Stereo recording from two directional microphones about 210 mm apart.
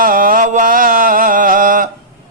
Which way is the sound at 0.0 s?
40° right (ahead or behind).